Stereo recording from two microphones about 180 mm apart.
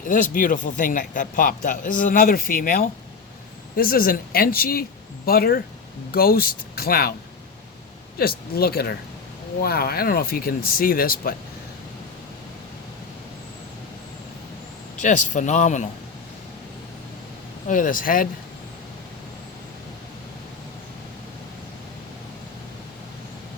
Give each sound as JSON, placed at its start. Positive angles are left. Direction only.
{"t": 0.1, "sound": "a man's voice", "side_deg": 45}
{"t": 8.2, "sound": "speech", "side_deg": 55}
{"t": 14.9, "sound": "a man's voice", "side_deg": 45}
{"t": 17.7, "sound": "a man's voice", "side_deg": 50}